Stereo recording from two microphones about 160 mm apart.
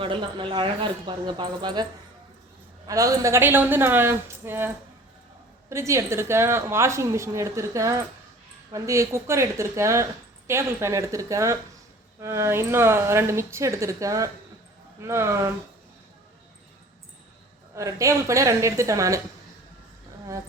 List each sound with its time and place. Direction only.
0.0 s a woman's voice: 30° right (ahead or behind); by 15.4 s 15° right (ahead or behind)
17.7 s a woman's voice: 20° right (ahead or behind)